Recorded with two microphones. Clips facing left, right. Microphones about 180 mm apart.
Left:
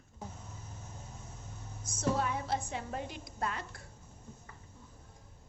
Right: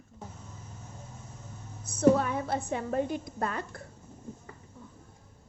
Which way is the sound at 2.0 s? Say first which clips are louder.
Right 9 dB; 55° right (ahead or behind).